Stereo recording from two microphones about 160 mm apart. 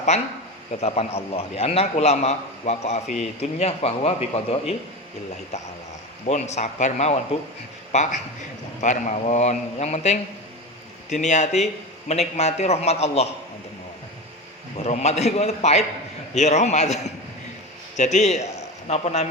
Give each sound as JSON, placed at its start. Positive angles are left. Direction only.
{"t": 0.1, "sound": "a man's voice", "side_deg": 45}
{"t": 6.2, "sound": "a man's voice", "side_deg": 45}
{"t": 14.8, "sound": "a man's voice", "side_deg": 45}